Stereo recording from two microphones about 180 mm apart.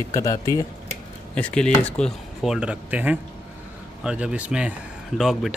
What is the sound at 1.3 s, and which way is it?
Speech, 5° left (ahead or behind).